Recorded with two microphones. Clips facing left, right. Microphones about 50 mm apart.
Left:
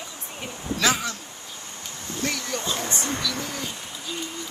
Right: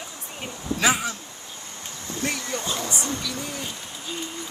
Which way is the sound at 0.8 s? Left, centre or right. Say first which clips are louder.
Right 1 dB; centre.